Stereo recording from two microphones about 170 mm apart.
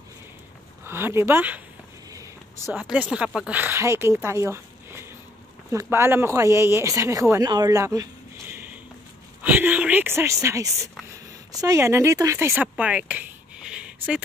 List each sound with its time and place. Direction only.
0.8 s speech: 15° right (ahead or behind)
2.0 s a sound: 20° right (ahead or behind)
2.7 s speech: 10° right (ahead or behind)